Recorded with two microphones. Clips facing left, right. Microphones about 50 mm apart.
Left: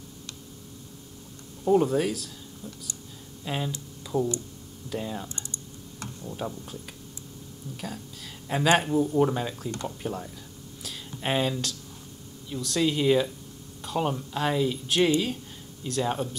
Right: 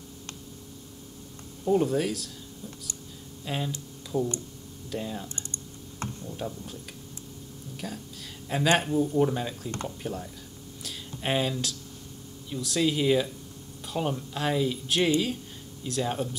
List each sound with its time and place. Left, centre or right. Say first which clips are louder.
1.7 s speech: left 2 dB; centre
2.6 s speech: left 1 dB; centre
3.4 s speech: left 1 dB; centre
4.1 s speech: left 2 dB; left
4.8 s speech: left 1 dB; centre
10.8 s a sound: left 1 dB; centre
12.4 s speech: left 1 dB; centre